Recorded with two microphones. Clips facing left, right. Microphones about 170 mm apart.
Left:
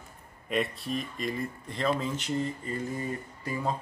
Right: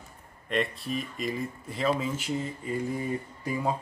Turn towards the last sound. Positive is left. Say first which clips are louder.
# right 2 dB
turn(degrees=-10)  # may be behind; listen again after turning